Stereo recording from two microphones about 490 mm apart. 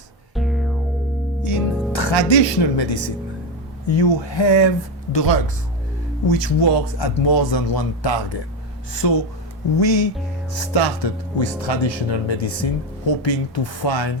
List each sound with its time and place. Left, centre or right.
0.3 s music: centre
1.4 s music: left
3.9 s speech: left